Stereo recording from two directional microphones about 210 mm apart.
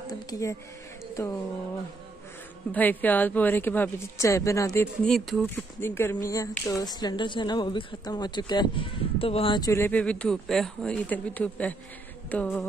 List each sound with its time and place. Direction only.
0.3 s a woman's voice: 15° left (ahead or behind)
2.7 s a woman's voice: 10° left (ahead or behind)
5.0 s speech: centre (ahead or behind)
5.8 s a woman's voice: 10° left (ahead or behind)